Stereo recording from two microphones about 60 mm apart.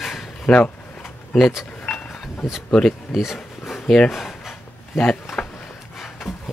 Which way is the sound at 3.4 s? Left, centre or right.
Centre.